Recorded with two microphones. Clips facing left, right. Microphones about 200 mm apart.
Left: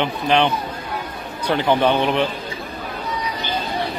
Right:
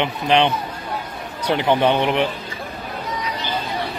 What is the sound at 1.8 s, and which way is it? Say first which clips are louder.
Speech: even; 20° right (ahead or behind).